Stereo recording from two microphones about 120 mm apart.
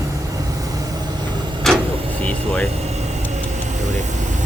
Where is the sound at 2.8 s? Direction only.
65° right (ahead or behind); by 4.4 s 90° right.